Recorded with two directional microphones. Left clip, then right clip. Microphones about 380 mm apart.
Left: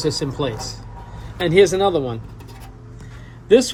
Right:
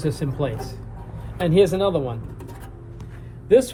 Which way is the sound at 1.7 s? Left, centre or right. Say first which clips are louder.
Left 3 dB; left.